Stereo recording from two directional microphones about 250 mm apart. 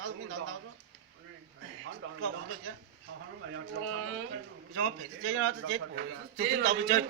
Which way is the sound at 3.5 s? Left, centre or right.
Right.